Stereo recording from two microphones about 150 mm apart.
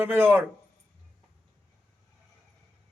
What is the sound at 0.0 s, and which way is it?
Speech, 15° right (ahead or behind).